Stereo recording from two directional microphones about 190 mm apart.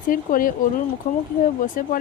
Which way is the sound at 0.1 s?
45° left (ahead or behind).